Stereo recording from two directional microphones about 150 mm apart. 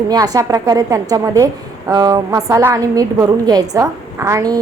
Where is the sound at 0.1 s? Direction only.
25° right (ahead or behind).